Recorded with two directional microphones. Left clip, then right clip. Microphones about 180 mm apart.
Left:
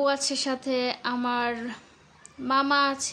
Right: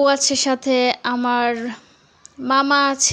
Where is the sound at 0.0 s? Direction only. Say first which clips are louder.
Right 9 dB; 40° right (ahead or behind).